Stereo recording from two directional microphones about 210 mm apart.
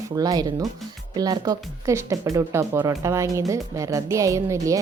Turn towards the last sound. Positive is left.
turn(degrees=-15)  # may be behind; listen again after turning